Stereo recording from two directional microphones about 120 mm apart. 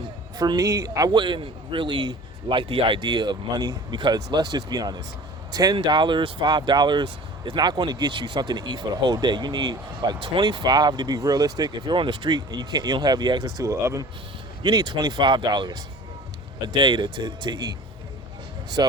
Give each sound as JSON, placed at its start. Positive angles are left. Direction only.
{"t": 0.3, "sound": "speech", "side_deg": -30}
{"t": 18.8, "sound": "speech", "side_deg": -35}